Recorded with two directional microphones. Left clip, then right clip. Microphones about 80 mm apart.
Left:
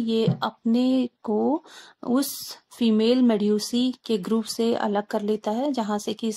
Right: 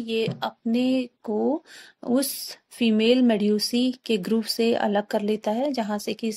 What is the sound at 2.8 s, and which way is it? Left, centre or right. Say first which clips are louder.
Speech: right 1 dB; left.